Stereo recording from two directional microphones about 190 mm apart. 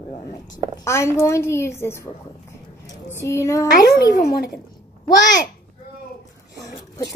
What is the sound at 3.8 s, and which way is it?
Speech, 55° left (ahead or behind).